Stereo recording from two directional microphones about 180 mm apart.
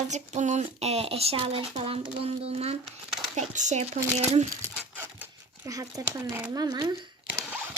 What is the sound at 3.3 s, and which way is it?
Speech, 40° right (ahead or behind).